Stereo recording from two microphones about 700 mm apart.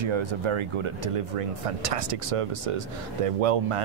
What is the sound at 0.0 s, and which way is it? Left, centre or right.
Speech, right.